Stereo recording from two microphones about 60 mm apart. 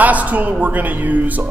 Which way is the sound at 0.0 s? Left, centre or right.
Right.